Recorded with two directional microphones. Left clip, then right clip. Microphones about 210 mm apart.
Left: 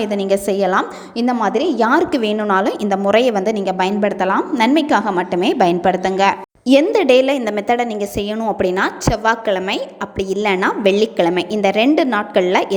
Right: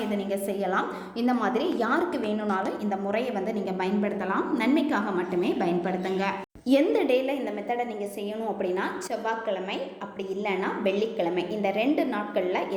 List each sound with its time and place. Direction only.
0.0 s a woman's voice: 45° left (ahead or behind)